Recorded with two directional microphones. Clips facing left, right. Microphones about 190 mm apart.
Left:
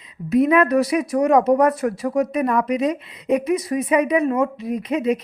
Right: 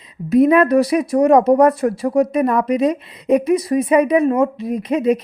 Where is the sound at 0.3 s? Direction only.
40° right (ahead or behind).